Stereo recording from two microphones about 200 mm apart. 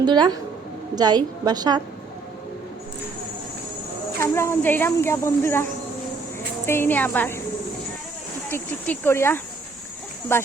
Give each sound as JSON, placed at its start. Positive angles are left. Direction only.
{"t": 0.0, "sound": "a woman's voice", "side_deg": -20}
{"t": 4.2, "sound": "speech", "side_deg": 15}
{"t": 6.7, "sound": "speech", "side_deg": 10}
{"t": 8.4, "sound": "speech", "side_deg": 10}